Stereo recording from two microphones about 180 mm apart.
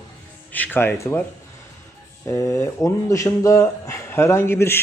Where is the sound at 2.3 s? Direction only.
15° left (ahead or behind).